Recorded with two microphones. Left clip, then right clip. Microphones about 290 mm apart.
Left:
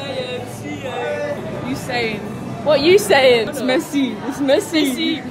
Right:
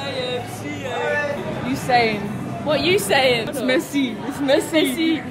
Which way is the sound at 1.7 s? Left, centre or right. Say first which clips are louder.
Right 5 dB; centre.